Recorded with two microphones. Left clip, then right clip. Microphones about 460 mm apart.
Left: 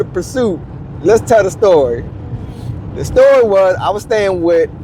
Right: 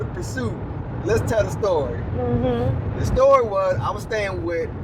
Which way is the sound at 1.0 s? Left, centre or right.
Left.